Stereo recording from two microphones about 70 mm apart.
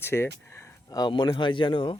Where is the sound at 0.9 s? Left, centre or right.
Left.